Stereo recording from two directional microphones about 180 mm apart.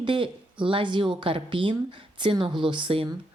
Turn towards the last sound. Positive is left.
turn(degrees=-30)  # may be behind; listen again after turning